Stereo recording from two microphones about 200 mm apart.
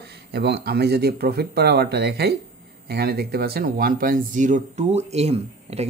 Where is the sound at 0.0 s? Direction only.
55° right (ahead or behind).